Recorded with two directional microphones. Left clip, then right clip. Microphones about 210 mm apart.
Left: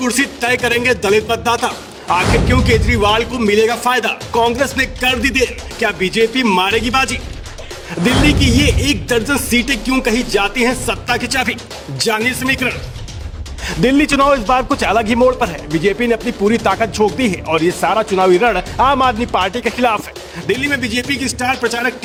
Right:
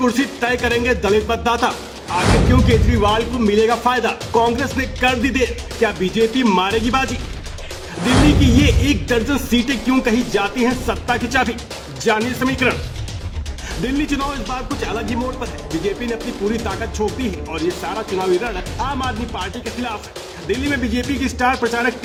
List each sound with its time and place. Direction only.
0.0 s a man's voice: 45° left (ahead or behind)
2.1 s speech: centre (ahead or behind)
2.5 s a man's voice: 45° left (ahead or behind)
8.0 s a sound: centre (ahead or behind)
8.4 s a man's voice: 50° left (ahead or behind)
13.8 s a man's voice: 50° left (ahead or behind)